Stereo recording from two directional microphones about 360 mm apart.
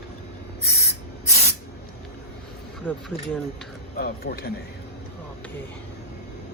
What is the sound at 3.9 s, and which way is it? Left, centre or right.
Speech, left.